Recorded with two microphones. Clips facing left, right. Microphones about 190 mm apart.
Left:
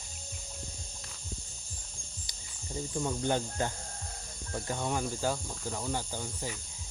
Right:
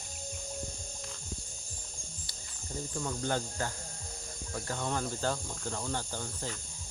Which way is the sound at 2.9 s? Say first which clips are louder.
Left 3 dB; 15° left (ahead or behind).